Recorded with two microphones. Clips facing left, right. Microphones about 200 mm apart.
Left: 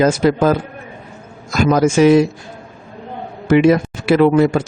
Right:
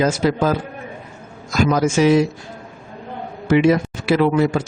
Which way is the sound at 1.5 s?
55° left (ahead or behind).